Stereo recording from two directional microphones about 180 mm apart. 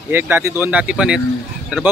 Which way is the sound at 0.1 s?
15° right (ahead or behind).